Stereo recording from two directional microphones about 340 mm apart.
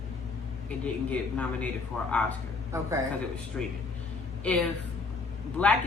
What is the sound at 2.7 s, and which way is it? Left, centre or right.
Speech, centre.